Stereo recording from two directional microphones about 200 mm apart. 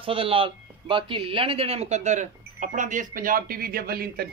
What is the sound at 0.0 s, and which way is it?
Speech, 25° right (ahead or behind).